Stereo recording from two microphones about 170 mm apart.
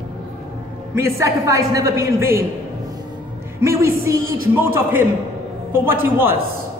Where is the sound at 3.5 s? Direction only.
15° right (ahead or behind).